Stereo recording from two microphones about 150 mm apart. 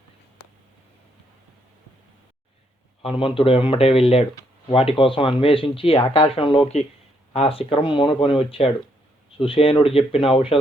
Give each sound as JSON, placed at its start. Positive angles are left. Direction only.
{"t": 3.0, "sound": "speech", "side_deg": 40}